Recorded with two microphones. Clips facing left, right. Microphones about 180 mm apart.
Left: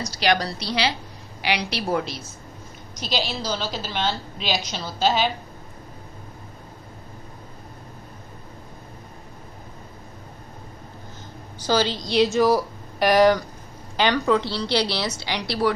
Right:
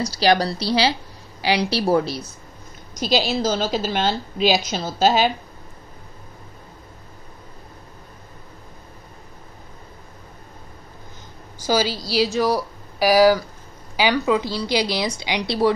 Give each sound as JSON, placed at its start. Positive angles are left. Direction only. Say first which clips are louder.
{"t": 0.0, "sound": "a woman's voice", "louder": "right 4 dB", "side_deg": -30}
{"t": 3.0, "sound": "a woman's voice", "louder": "right 7 dB", "side_deg": -45}
{"t": 11.6, "sound": "a woman's voice", "louder": "right 1 dB", "side_deg": -10}